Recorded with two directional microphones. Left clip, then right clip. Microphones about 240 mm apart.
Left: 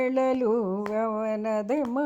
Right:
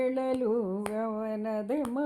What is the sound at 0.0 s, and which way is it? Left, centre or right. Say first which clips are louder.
Speech: left 5 dB; left.